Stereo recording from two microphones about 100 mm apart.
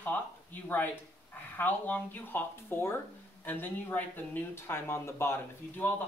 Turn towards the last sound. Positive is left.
turn(degrees=20)  # may be behind; listen again after turning